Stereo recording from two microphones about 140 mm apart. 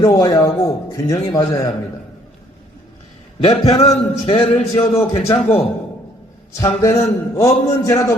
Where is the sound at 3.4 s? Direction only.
45° left (ahead or behind).